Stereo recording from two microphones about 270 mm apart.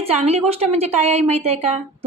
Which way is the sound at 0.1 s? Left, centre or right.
Right.